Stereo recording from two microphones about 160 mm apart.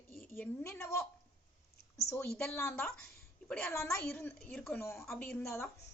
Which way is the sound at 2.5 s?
15° left (ahead or behind).